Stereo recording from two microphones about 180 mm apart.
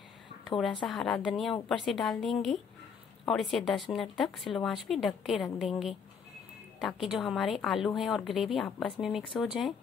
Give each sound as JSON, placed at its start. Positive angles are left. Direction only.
{"t": 0.6, "sound": "a woman's voice", "side_deg": 5}